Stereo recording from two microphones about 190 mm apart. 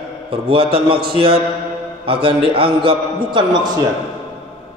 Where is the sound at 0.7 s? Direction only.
30° right (ahead or behind).